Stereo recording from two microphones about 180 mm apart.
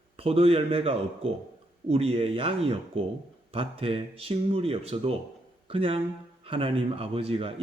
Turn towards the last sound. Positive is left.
turn(degrees=-30)  # may be behind; listen again after turning